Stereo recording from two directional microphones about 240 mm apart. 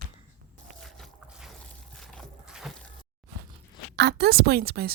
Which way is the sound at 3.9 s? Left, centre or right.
Right.